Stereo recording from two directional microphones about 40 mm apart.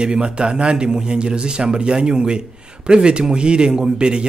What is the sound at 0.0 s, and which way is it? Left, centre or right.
A man's voice, right.